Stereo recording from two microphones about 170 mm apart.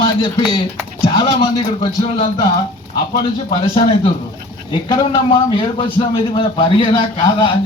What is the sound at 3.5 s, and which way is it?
A man's voice, 30° left (ahead or behind).